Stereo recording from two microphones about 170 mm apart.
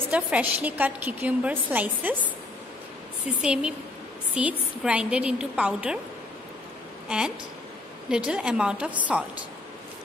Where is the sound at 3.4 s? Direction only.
5° right (ahead or behind).